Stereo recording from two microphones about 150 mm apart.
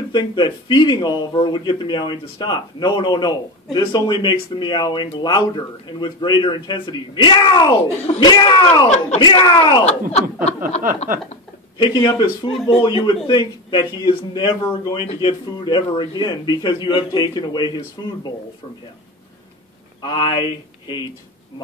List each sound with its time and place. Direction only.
0.1 s a man's voice: 30° left (ahead or behind)
9.8 s speech: 45° left (ahead or behind)
11.8 s a man's voice: 30° left (ahead or behind)
20.0 s speech: 30° left (ahead or behind)